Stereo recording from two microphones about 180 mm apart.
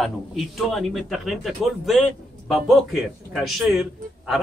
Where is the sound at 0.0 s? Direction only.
Centre (ahead or behind).